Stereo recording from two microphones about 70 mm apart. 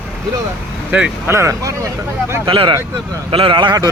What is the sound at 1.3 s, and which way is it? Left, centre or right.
Speech, right.